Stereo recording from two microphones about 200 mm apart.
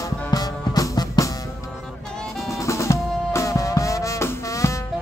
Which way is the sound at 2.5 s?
15° left (ahead or behind).